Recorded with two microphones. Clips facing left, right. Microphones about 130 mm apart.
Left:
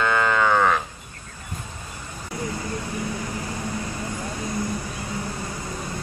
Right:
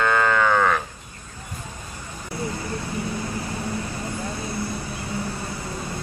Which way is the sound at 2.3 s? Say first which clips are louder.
Even; 15° left (ahead or behind).